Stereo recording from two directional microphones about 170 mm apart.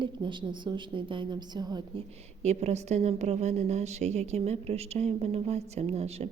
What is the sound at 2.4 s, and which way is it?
A woman's voice, 40° right (ahead or behind).